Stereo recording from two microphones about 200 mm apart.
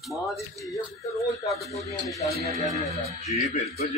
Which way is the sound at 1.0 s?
15° left (ahead or behind).